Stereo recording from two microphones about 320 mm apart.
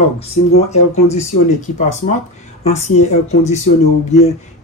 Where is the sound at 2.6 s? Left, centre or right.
Left.